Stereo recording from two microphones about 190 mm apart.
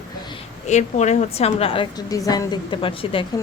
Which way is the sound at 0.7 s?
40° left (ahead or behind).